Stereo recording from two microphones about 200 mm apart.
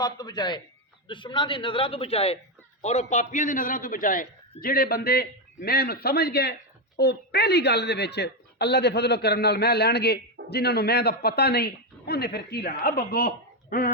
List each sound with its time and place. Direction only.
0.0 s a man's voice: 20° left (ahead or behind); by 13.9 s 45° left (ahead or behind)